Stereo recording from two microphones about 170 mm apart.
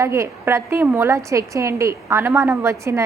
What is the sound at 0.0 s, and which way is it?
A woman's voice, 15° right (ahead or behind).